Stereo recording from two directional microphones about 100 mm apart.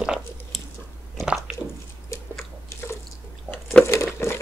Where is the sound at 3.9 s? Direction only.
30° left (ahead or behind).